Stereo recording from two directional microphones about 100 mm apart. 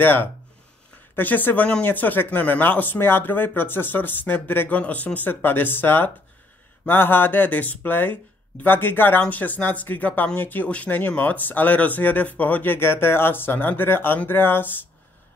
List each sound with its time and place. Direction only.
0.0 s speech: 20° left (ahead or behind)